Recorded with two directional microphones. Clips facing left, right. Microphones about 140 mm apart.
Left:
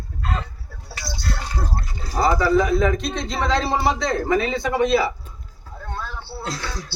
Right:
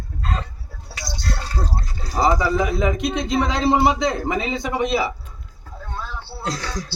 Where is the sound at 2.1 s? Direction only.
15° right (ahead or behind).